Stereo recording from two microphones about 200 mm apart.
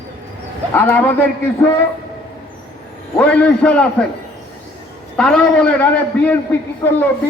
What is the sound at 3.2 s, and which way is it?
Speech, 5° left (ahead or behind).